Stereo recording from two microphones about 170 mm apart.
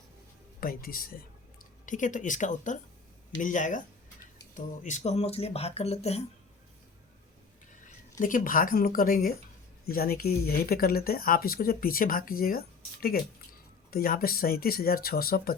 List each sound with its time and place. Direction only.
0.6 s speech: 60° left (ahead or behind)
1.9 s speech: 50° left (ahead or behind)
8.2 s speech: 55° left (ahead or behind)